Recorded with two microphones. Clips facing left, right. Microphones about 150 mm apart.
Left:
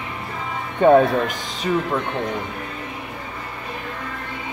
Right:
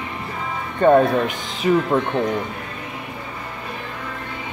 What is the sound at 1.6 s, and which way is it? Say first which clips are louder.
Speech: right 4 dB; 10° right (ahead or behind).